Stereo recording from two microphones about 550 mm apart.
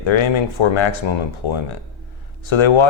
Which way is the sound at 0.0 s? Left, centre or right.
Left.